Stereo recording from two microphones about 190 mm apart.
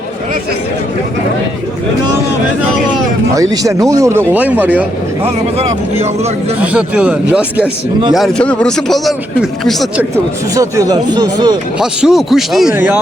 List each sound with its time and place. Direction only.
3.5 s speech: 20° right (ahead or behind)
5.2 s speech: 35° right (ahead or behind)
6.6 s speech: 5° right (ahead or behind)
10.5 s speech: 15° right (ahead or behind)
11.8 s speech: 5° right (ahead or behind)